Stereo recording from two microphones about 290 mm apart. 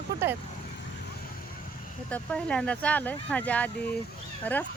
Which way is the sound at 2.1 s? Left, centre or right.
Centre.